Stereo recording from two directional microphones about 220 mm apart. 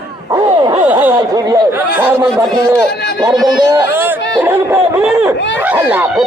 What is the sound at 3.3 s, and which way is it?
Speech, centre (ahead or behind).